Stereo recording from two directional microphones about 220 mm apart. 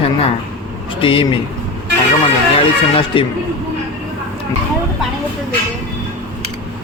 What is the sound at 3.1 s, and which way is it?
Speech, 25° left (ahead or behind).